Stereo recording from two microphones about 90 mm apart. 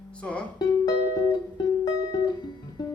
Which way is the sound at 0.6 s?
45° left (ahead or behind).